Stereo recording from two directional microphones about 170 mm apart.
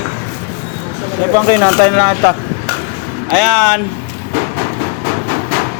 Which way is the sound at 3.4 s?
10° left (ahead or behind).